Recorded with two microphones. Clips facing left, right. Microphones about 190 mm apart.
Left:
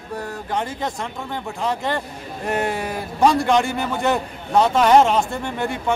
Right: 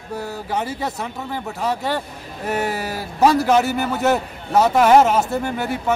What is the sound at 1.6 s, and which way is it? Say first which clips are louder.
A man's voice: right 1 dB; 5° right (ahead or behind).